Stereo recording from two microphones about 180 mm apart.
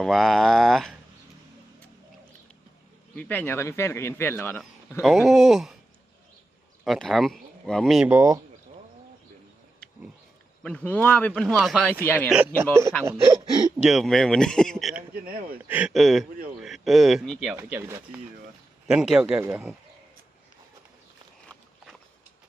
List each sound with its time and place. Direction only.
0.0 s speech: centre (ahead or behind)
3.2 s speech: 10° left (ahead or behind)
5.0 s speech: centre (ahead or behind)
6.8 s speech: centre (ahead or behind)
8.1 s speech: 15° right (ahead or behind)
10.6 s speech: 5° left (ahead or behind)
13.1 s speech: 15° right (ahead or behind)
13.8 s speech: centre (ahead or behind)
15.3 s speech: 55° right (ahead or behind)
15.6 s speech: 10° right (ahead or behind)